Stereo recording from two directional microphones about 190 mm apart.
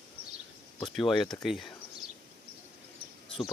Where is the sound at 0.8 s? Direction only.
Centre (ahead or behind).